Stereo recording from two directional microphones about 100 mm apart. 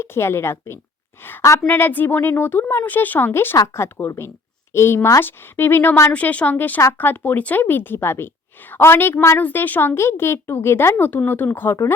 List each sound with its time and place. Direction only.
0.0 s a woman's voice: 25° left (ahead or behind)